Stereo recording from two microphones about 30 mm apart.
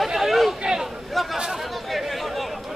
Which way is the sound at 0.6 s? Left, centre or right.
Right.